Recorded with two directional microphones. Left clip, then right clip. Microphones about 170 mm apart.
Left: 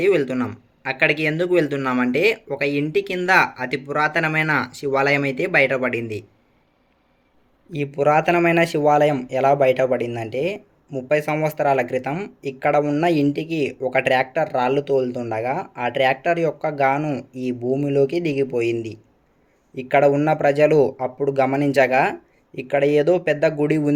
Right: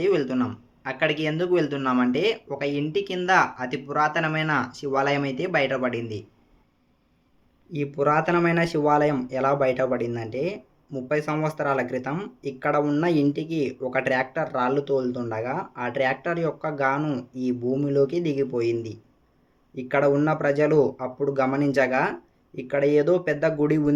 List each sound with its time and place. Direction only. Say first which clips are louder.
0.0 s speech: left 4 dB; 25° left (ahead or behind)
7.7 s speech: left 5 dB; 20° left (ahead or behind)